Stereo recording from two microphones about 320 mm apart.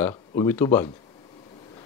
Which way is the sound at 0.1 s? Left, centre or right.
Centre.